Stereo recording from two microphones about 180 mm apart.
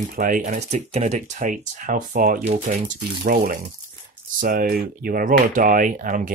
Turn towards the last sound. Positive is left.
turn(degrees=-45)  # may be behind; listen again after turning